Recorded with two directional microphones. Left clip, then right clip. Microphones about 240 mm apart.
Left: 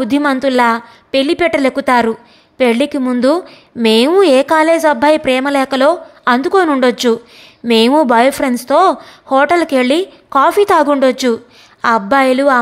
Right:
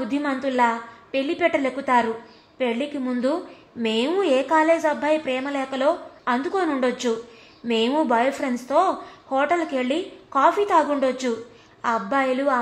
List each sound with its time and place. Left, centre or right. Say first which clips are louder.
0.0 s a woman's voice: left 11 dB; left